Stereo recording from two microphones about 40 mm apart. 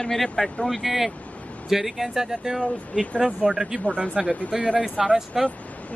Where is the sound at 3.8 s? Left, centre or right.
Left.